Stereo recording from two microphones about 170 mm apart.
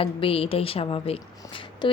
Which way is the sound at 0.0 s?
35° left (ahead or behind).